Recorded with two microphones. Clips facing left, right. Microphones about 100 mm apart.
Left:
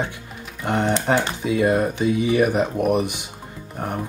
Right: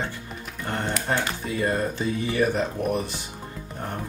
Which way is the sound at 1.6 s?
15° left (ahead or behind).